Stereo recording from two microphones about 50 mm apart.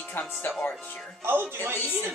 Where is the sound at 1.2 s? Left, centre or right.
Right.